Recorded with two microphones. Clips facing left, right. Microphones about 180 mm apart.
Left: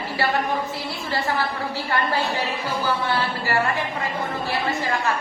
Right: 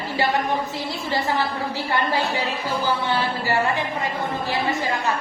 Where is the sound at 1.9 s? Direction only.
15° right (ahead or behind).